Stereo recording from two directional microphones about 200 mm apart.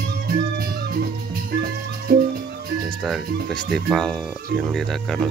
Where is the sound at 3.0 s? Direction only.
Centre (ahead or behind).